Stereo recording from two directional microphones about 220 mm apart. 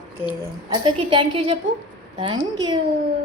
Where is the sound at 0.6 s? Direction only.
20° right (ahead or behind).